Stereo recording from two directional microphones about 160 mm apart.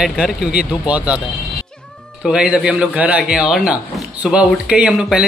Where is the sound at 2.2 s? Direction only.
5° right (ahead or behind).